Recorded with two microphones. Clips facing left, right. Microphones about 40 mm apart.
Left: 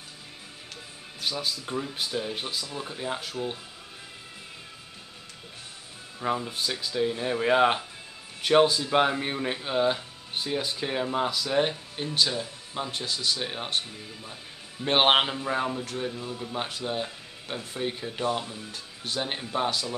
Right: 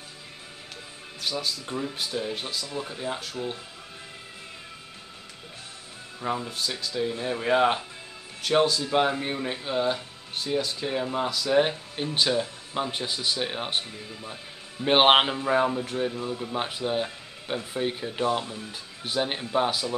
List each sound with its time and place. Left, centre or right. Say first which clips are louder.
1.2 s speech: even; centre
6.2 s speech: left 1 dB; centre
11.4 s speech: right 3 dB; centre
12.1 s speech: right 2 dB; right